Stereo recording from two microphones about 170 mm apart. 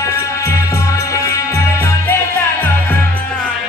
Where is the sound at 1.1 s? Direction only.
20° left (ahead or behind).